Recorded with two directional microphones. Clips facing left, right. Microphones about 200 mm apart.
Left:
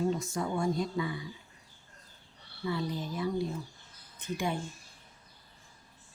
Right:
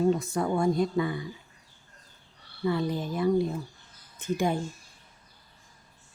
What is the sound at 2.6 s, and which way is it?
Speech, 55° right (ahead or behind).